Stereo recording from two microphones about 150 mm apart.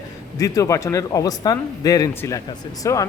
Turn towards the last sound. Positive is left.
turn(degrees=20)  # may be behind; listen again after turning